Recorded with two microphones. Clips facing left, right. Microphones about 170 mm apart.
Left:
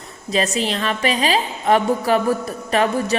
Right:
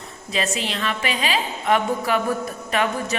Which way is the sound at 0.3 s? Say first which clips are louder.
Left 5 dB; 40° left (ahead or behind).